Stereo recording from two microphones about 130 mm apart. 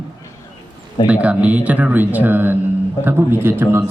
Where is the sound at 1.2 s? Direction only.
10° right (ahead or behind).